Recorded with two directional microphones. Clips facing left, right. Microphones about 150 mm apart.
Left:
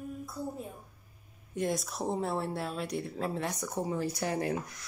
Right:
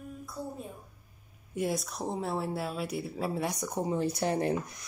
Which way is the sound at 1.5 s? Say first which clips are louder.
Even; 5° right (ahead or behind).